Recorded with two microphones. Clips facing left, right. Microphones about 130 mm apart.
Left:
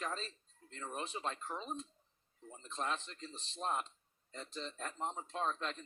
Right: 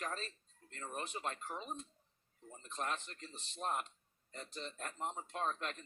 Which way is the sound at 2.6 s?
30° left (ahead or behind).